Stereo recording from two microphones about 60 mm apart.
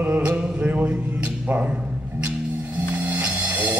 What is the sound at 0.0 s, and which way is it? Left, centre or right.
Music, right.